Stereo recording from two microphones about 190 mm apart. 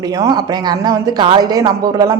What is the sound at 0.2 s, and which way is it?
Speech, 20° right (ahead or behind).